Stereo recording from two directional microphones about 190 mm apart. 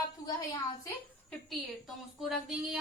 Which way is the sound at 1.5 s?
Centre (ahead or behind).